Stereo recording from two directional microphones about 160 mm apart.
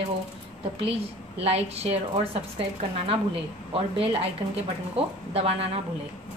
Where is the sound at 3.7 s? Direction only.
35° right (ahead or behind).